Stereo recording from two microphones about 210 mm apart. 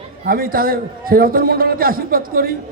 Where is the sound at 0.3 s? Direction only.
45° right (ahead or behind).